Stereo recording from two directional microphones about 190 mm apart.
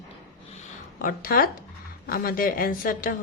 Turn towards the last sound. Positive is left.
turn(degrees=45)  # may be behind; listen again after turning